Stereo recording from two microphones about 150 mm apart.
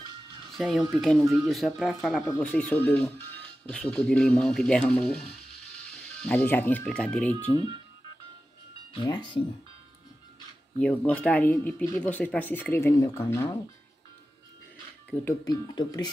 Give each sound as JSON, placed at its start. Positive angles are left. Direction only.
{"t": 0.6, "sound": "speech", "side_deg": 0}
{"t": 2.2, "sound": "speech", "side_deg": 10}
{"t": 8.9, "sound": "speech", "side_deg": 30}
{"t": 10.8, "sound": "speech", "side_deg": 10}
{"t": 15.1, "sound": "speech", "side_deg": 10}
{"t": 15.4, "sound": "speech", "side_deg": 30}